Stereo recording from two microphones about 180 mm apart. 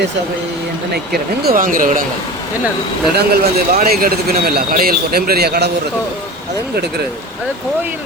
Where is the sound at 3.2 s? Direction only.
55° right (ahead or behind).